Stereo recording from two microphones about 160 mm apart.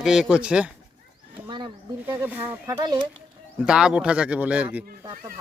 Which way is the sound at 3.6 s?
5° right (ahead or behind).